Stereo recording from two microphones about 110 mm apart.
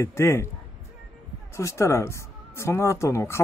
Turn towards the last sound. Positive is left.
turn(degrees=25)  # may be behind; listen again after turning